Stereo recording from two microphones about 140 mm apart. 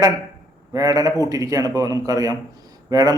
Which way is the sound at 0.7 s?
25° right (ahead or behind).